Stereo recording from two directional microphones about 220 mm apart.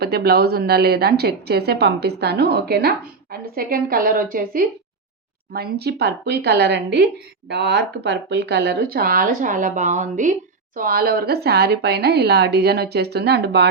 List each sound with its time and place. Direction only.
0.0 s a woman's voice: 45° right (ahead or behind)